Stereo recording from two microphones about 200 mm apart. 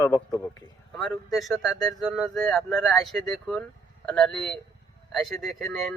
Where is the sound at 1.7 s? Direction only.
20° left (ahead or behind).